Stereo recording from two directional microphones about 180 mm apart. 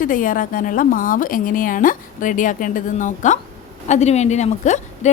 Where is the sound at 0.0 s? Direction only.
50° left (ahead or behind).